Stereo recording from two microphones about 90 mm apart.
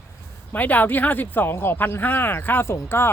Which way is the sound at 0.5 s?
20° left (ahead or behind).